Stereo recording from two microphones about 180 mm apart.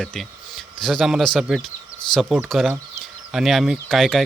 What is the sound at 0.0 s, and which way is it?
Speech, centre (ahead or behind).